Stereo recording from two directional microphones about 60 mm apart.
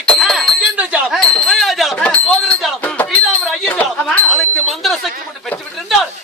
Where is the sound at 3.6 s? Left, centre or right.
Left.